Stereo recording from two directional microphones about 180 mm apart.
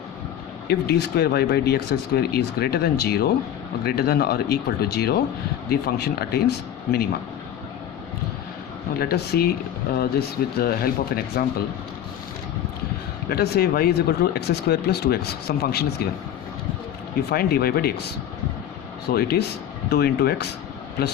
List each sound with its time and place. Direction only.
0.7 s speech: 65° left (ahead or behind)
9.0 s speech: 60° left (ahead or behind)
13.3 s speech: 60° left (ahead or behind)
17.2 s speech: 60° left (ahead or behind)
19.1 s speech: 60° left (ahead or behind)